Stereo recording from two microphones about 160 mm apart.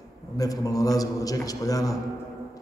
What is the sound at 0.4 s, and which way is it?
A man's voice, 20° left (ahead or behind).